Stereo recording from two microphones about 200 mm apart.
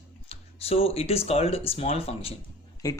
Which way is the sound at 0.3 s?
30° left (ahead or behind).